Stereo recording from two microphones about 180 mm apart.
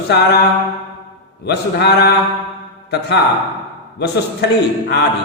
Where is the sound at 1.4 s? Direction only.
70° left (ahead or behind).